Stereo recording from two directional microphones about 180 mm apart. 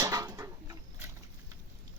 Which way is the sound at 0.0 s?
20° right (ahead or behind).